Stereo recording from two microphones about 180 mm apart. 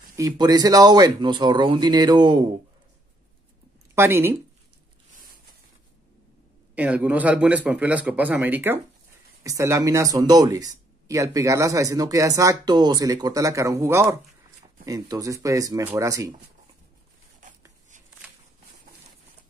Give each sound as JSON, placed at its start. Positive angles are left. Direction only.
{"t": 0.1, "sound": "speech", "side_deg": -20}
{"t": 3.9, "sound": "speech", "side_deg": -15}
{"t": 6.7, "sound": "speech", "side_deg": -10}